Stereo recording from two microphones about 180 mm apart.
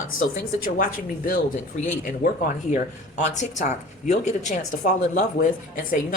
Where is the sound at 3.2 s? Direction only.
40° left (ahead or behind).